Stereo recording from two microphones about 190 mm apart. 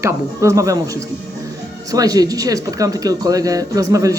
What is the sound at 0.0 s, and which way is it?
Speech, 15° right (ahead or behind).